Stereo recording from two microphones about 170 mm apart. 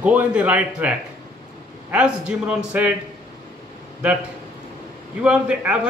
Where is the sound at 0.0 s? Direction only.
10° right (ahead or behind).